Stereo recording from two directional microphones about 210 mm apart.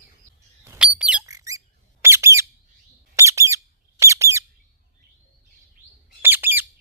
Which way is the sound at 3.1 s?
15° right (ahead or behind).